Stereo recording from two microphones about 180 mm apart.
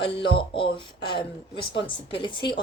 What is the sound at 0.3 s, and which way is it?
Speech, 30° left (ahead or behind).